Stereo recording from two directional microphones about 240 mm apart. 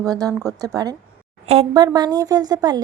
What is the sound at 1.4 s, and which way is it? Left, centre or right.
Speech, right.